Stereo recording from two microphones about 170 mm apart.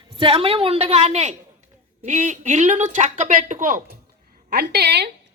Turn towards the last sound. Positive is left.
turn(degrees=-75)  # may be behind; listen again after turning